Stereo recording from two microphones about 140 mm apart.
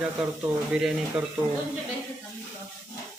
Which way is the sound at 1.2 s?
5° right (ahead or behind).